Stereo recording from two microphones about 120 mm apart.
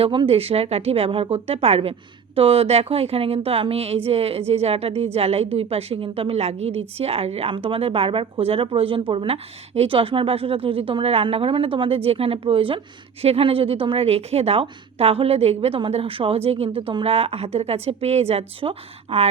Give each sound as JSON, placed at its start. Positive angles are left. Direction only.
{"t": 0.0, "sound": "a woman's voice", "side_deg": -50}